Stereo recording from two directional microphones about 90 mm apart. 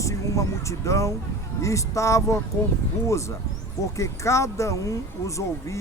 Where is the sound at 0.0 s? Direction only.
35° left (ahead or behind).